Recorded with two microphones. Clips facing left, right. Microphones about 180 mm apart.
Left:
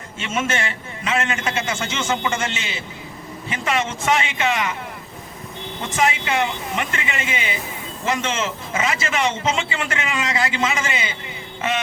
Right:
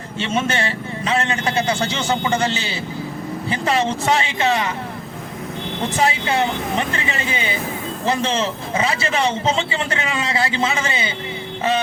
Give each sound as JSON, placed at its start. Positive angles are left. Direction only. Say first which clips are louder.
{"t": 0.2, "sound": "a man's voice", "louder": "right 3 dB", "side_deg": -35}
{"t": 6.0, "sound": "a man's voice", "louder": "right 1 dB", "side_deg": -35}